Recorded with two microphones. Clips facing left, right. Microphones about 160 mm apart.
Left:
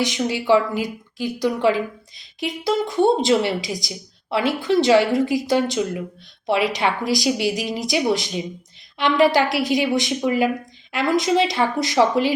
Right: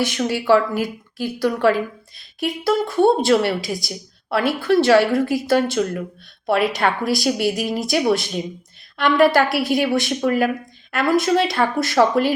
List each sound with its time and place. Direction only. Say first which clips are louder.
0.0 s a woman's voice: right 1 dB; 15° left (ahead or behind)